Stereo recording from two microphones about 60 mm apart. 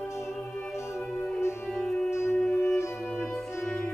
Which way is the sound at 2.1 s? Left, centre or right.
Left.